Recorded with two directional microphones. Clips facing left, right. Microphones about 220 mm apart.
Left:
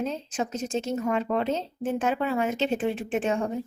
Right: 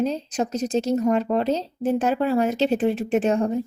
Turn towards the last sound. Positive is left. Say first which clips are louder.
# right 6 dB
turn(degrees=-40)  # may be behind; listen again after turning